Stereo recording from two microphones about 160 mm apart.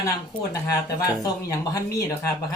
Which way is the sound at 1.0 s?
20° left (ahead or behind).